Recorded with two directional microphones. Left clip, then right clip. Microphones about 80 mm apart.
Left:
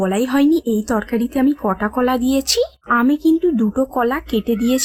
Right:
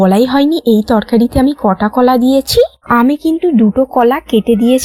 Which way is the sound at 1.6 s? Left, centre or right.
Right.